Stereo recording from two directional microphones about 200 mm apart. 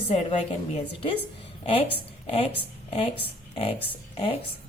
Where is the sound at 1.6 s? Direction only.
30° left (ahead or behind).